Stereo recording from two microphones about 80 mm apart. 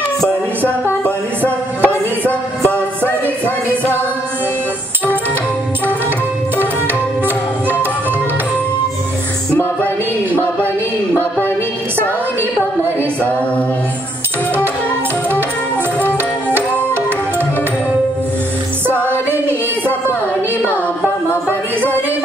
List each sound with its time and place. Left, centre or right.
0.7 s music: centre